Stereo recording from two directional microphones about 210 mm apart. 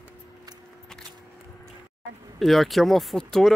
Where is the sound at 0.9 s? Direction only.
Centre (ahead or behind).